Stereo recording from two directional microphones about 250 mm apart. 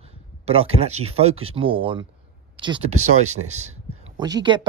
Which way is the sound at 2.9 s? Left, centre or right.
Right.